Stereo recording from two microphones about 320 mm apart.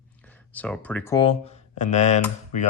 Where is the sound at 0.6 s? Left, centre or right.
Centre; by 2.2 s left.